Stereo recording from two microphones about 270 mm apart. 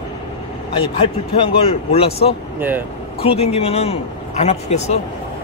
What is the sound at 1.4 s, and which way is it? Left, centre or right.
Speech, left.